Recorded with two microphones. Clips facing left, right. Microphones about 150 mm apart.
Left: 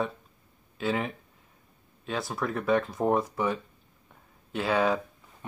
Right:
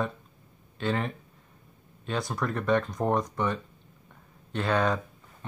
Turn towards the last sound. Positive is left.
turn(degrees=5)  # may be behind; listen again after turning